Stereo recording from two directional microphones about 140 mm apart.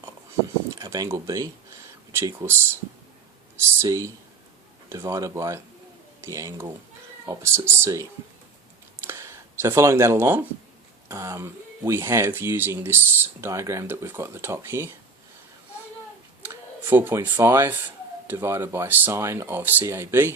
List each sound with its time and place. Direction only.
0.7 s speech: 25° right (ahead or behind)
9.0 s a sound: 20° right (ahead or behind)
11.1 s speech: 20° right (ahead or behind)
16.9 s speech: 15° right (ahead or behind)